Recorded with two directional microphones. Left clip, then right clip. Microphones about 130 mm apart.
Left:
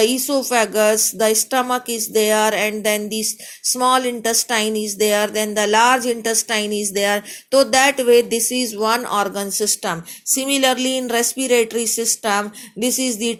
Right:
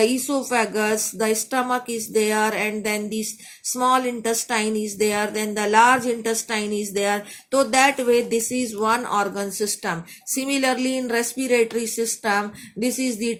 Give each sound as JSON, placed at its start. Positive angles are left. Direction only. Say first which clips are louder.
{"t": 0.0, "sound": "a woman's voice", "louder": "left 3 dB", "side_deg": 25}